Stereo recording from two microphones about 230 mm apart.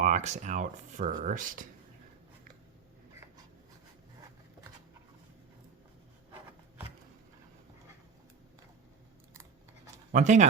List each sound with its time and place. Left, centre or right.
0.0 s speech: right
9.3 s scissors: centre
10.1 s speech: right